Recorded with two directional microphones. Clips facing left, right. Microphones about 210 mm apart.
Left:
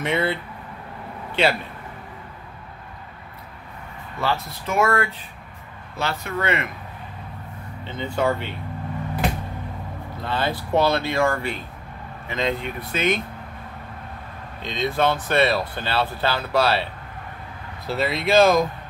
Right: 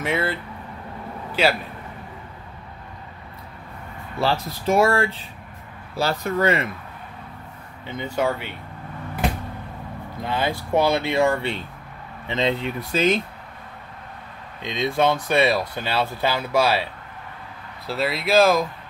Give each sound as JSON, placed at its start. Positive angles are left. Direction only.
{"t": 0.0, "sound": "a man's voice", "side_deg": 0}
{"t": 4.2, "sound": "speech", "side_deg": -30}
{"t": 7.8, "sound": "speech", "side_deg": -10}
{"t": 10.2, "sound": "speech", "side_deg": -15}
{"t": 14.6, "sound": "speech", "side_deg": -15}
{"t": 17.8, "sound": "speech", "side_deg": 0}